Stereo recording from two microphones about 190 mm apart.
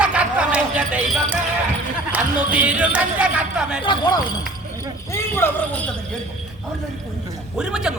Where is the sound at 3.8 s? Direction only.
20° left (ahead or behind).